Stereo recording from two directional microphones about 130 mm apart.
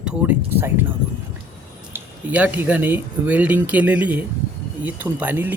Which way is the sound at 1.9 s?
10° right (ahead or behind).